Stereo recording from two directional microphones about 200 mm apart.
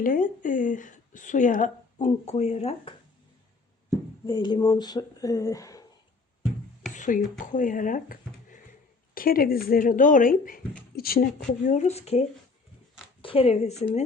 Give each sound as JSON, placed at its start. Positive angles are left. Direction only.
{"t": 0.0, "sound": "a woman's voice", "side_deg": 45}
{"t": 4.3, "sound": "speech", "side_deg": 20}
{"t": 6.9, "sound": "speech", "side_deg": 40}
{"t": 13.2, "sound": "speech", "side_deg": 30}